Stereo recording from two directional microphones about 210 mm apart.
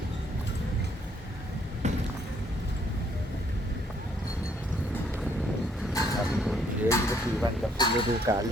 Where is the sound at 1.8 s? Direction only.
35° right (ahead or behind).